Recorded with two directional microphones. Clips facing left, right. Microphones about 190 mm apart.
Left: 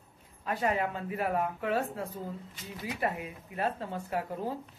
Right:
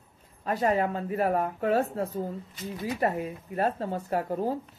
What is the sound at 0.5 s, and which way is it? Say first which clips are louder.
Speech: right 5 dB; 40° right (ahead or behind).